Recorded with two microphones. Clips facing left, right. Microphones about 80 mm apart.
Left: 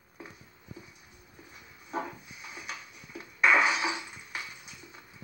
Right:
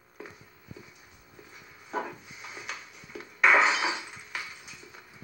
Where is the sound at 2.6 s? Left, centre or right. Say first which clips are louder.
Right 1 dB; centre.